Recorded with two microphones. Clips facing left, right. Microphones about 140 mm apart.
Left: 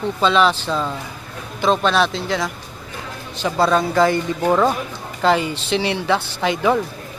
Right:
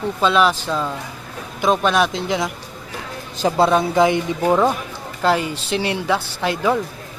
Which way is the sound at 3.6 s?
20° right (ahead or behind).